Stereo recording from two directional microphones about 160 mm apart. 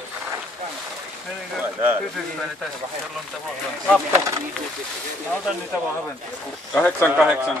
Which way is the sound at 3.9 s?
15° right (ahead or behind).